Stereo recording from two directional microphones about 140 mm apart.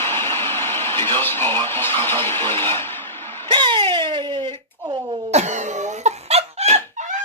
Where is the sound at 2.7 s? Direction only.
15° left (ahead or behind).